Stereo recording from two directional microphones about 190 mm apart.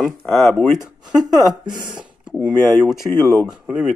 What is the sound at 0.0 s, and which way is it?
Speech, centre (ahead or behind).